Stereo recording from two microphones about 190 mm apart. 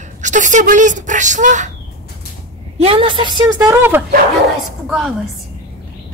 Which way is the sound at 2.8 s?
30° right (ahead or behind).